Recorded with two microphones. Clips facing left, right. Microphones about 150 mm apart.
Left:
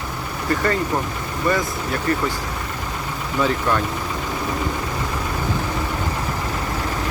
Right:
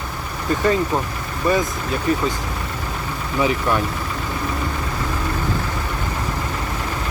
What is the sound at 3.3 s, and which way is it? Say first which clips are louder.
Speech: right 1 dB; 15° right (ahead or behind).